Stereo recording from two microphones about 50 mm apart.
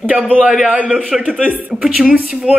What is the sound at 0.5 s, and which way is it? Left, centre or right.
Speech, centre.